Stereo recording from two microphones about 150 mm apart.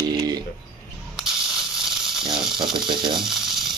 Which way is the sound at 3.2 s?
Centre (ahead or behind).